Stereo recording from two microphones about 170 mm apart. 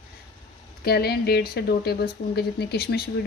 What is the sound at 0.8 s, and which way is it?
A woman's voice, 65° left (ahead or behind).